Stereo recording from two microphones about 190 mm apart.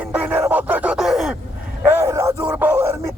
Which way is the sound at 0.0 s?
10° right (ahead or behind).